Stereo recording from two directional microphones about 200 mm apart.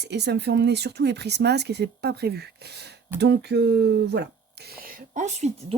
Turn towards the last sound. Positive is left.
turn(degrees=-35)  # may be behind; listen again after turning